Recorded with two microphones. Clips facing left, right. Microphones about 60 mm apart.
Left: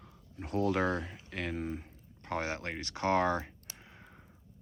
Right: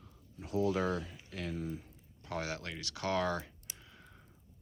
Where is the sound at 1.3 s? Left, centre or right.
Left.